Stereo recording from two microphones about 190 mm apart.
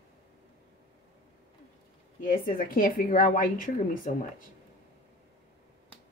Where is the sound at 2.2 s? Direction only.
50° left (ahead or behind).